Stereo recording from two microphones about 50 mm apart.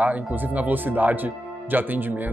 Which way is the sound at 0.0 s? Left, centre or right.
Right.